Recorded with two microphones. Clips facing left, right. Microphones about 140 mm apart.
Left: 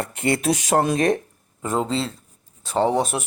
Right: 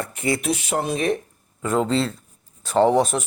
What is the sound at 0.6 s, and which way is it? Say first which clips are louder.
Speech: left 4 dB; 40° left (ahead or behind).